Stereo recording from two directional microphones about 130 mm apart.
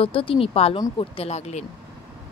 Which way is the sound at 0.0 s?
45° left (ahead or behind).